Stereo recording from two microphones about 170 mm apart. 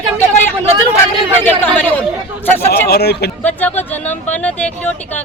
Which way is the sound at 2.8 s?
70° left (ahead or behind).